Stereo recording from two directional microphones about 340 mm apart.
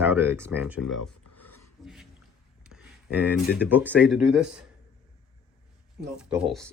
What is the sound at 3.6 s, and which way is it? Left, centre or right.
Speech, centre.